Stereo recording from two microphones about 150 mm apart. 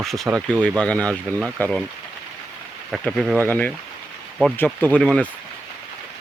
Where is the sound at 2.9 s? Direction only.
Centre (ahead or behind).